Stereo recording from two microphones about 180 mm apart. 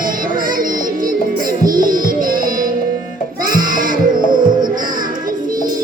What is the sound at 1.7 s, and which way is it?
Music, 50° right (ahead or behind).